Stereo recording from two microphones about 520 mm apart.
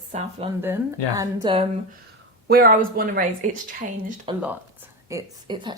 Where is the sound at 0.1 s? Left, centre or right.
Centre.